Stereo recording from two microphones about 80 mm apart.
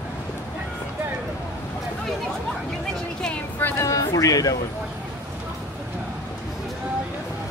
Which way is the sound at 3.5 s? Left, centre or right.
Left.